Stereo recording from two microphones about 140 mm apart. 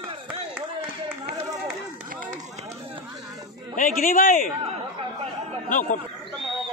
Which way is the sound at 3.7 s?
70° left (ahead or behind).